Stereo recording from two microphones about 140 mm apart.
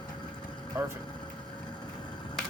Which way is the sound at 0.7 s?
20° right (ahead or behind).